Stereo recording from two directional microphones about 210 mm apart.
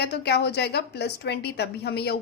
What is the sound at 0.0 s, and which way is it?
A woman's voice, 50° left (ahead or behind).